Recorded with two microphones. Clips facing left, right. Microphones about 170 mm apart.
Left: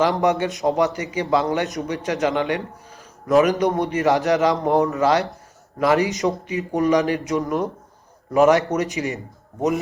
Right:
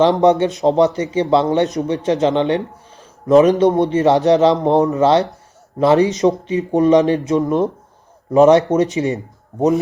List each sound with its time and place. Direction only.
0.0 s a man's voice: 20° right (ahead or behind)